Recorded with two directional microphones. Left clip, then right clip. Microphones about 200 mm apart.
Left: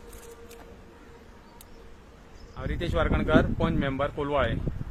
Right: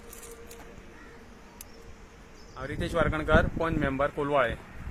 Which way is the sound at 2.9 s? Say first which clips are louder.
Even; centre (ahead or behind).